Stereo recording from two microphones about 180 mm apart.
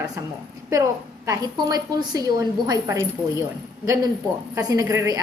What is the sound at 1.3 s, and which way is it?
A woman's voice, 20° right (ahead or behind).